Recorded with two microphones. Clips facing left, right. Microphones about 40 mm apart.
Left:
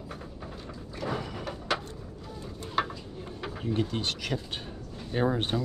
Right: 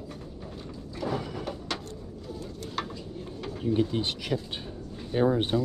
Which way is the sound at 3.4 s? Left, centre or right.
Centre.